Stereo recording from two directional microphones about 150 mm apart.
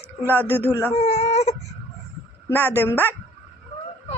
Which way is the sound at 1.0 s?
45° left (ahead or behind).